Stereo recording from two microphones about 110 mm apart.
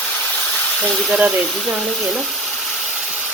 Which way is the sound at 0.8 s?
10° left (ahead or behind).